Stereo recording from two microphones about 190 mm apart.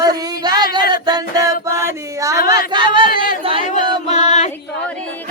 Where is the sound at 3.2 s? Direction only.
30° right (ahead or behind).